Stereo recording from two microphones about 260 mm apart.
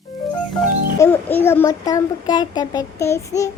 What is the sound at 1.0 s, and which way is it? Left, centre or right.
A child's voice, centre.